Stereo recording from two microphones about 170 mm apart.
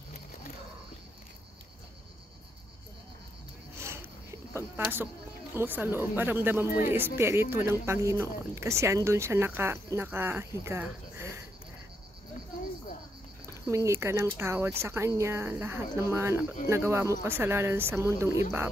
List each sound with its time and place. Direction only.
3.7 s a sound: 15° right (ahead or behind)
6.9 s speech: 15° right (ahead or behind)
13.7 s speech: 15° right (ahead or behind)